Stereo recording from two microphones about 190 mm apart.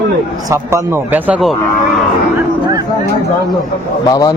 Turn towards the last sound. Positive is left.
turn(degrees=20)  # may be behind; listen again after turning